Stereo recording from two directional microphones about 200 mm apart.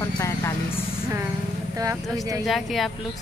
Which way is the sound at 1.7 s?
15° right (ahead or behind).